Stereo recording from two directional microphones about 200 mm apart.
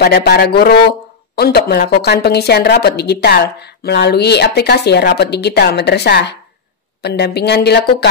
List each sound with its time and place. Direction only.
0.0 s a woman's voice: 55° left (ahead or behind)